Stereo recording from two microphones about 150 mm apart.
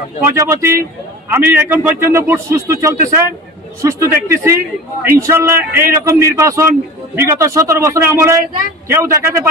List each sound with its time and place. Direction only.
0.3 s a man's voice: 15° right (ahead or behind)